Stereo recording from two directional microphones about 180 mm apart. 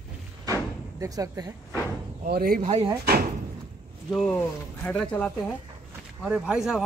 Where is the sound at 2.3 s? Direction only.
55° right (ahead or behind).